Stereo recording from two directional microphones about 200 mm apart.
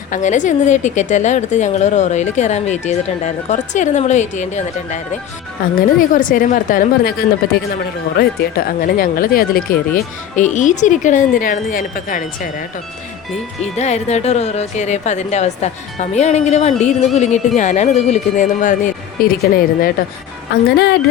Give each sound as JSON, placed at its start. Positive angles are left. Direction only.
{"t": 0.1, "sound": "a woman's voice", "side_deg": 40}
{"t": 6.0, "sound": "speech", "side_deg": 40}
{"t": 8.2, "sound": "speech", "side_deg": 50}
{"t": 13.7, "sound": "a woman's voice", "side_deg": 35}